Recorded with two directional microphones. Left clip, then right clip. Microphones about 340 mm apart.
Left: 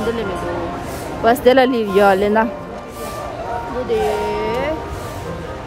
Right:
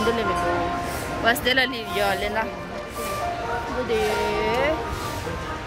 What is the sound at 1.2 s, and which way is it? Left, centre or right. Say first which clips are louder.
Speech: left 9 dB; centre.